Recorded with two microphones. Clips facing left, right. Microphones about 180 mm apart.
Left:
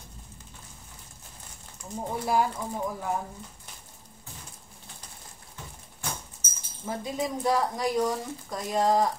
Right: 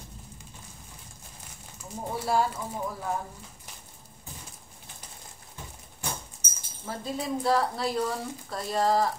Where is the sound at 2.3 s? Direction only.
15° left (ahead or behind).